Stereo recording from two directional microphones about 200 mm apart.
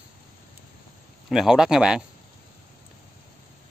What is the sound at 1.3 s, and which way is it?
Speech, centre (ahead or behind).